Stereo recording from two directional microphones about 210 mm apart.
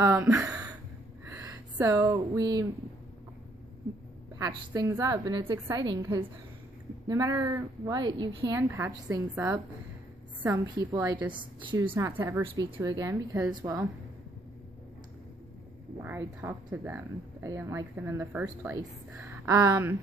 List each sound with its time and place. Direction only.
0.0 s speech: 10° right (ahead or behind)
1.2 s a sound: 15° right (ahead or behind)
4.4 s a woman's voice: 20° right (ahead or behind)
11.6 s a woman's voice: 25° right (ahead or behind)
11.9 s speech: 10° right (ahead or behind)
16.0 s speech: 10° right (ahead or behind)